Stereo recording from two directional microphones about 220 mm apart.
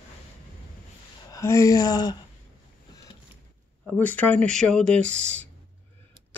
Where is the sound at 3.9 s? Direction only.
5° left (ahead or behind).